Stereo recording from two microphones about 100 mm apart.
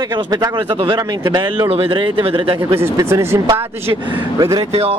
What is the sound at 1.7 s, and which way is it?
Speech, 65° right (ahead or behind).